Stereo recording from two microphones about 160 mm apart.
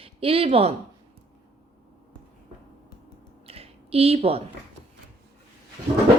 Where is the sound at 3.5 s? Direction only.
40° right (ahead or behind).